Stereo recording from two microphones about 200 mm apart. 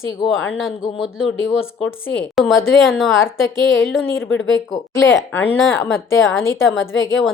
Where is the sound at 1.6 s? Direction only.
75° left (ahead or behind).